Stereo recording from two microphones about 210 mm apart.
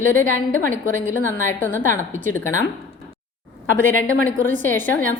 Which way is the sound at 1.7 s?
35° right (ahead or behind).